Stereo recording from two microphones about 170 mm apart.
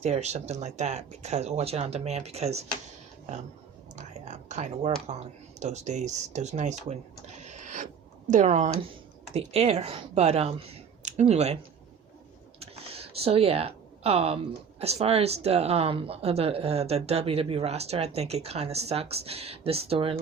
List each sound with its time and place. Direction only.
0.0 s speech: 40° right (ahead or behind)
3.9 s speech: 40° right (ahead or behind)
7.4 s a sound: 45° right (ahead or behind)
8.3 s speech: 45° right (ahead or behind)
12.5 s a sound: 35° right (ahead or behind)
14.8 s speech: 35° right (ahead or behind)